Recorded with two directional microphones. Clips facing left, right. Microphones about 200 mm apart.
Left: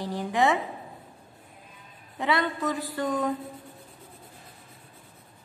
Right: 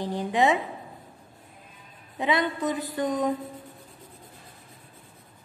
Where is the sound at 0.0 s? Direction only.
20° right (ahead or behind).